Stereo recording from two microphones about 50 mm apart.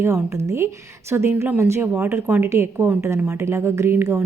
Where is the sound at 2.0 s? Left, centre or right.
Right.